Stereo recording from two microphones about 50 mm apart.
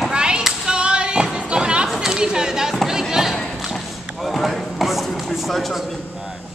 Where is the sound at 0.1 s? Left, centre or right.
Centre.